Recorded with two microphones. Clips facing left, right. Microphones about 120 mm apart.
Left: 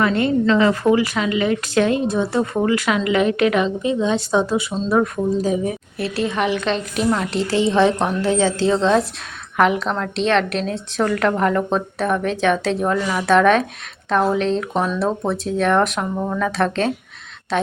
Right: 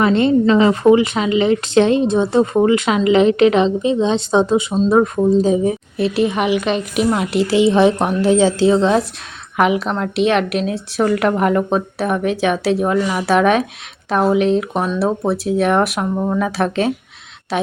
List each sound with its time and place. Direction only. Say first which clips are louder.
0.0 s a woman's voice: right 4 dB; 25° right (ahead or behind)
6.1 s a woman's voice: right 3 dB; 15° right (ahead or behind)